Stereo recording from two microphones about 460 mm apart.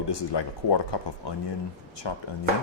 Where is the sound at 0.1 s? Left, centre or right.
Left.